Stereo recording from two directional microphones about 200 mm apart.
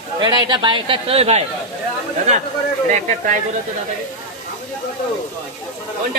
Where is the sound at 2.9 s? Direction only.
35° right (ahead or behind).